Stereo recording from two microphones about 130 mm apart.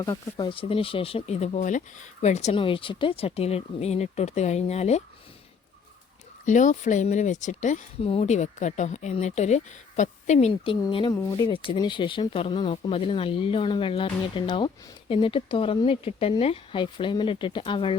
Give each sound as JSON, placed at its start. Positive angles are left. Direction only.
{"t": 0.0, "sound": "speech", "side_deg": 25}
{"t": 0.4, "sound": "speech", "side_deg": 45}
{"t": 2.6, "sound": "speech", "side_deg": 45}
{"t": 6.4, "sound": "speech", "side_deg": 70}
{"t": 8.0, "sound": "speech", "side_deg": 50}
{"t": 11.3, "sound": "speech", "side_deg": 40}